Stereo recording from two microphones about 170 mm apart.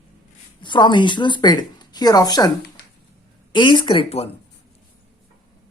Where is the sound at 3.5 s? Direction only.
25° left (ahead or behind).